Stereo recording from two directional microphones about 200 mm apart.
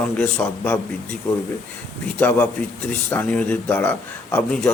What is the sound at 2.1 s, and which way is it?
A man's voice, 5° left (ahead or behind).